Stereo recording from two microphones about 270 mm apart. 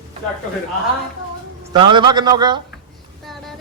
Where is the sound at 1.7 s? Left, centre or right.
Centre.